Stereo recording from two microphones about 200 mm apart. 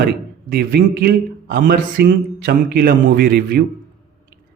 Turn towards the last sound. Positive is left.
turn(degrees=-50)  # may be behind; listen again after turning